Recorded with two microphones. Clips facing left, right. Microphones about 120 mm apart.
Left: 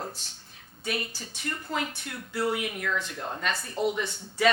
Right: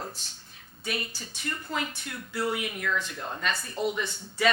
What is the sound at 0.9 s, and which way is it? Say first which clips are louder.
Speech: left 2 dB; 55° left (ahead or behind).